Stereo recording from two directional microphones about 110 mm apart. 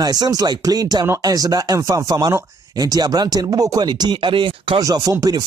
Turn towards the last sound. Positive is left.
turn(degrees=-30)  # may be behind; listen again after turning